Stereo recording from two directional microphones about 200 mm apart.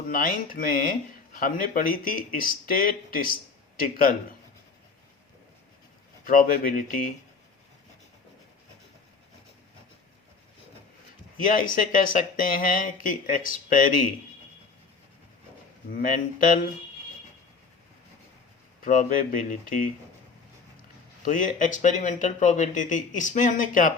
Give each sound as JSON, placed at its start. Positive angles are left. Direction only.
{"t": 0.1, "sound": "speech", "side_deg": 45}
{"t": 6.2, "sound": "speech", "side_deg": 45}
{"t": 11.4, "sound": "speech", "side_deg": 45}
{"t": 15.9, "sound": "speech", "side_deg": 45}
{"t": 18.8, "sound": "speech", "side_deg": 40}
{"t": 21.2, "sound": "speech", "side_deg": 40}